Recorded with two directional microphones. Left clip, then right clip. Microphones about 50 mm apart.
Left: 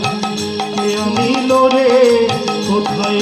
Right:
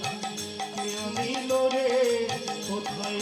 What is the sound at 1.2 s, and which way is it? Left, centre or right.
Music, left.